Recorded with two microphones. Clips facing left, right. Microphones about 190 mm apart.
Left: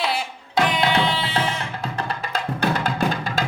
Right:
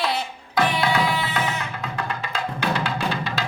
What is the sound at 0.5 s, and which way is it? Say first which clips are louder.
Music: left 1 dB; 25° left (ahead or behind).